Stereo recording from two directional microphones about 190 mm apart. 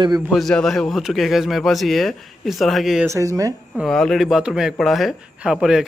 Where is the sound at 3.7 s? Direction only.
Centre (ahead or behind).